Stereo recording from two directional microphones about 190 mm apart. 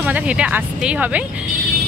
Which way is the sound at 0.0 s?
5° right (ahead or behind).